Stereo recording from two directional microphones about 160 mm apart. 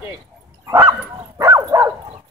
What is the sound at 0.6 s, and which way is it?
Bow-wow, 15° right (ahead or behind).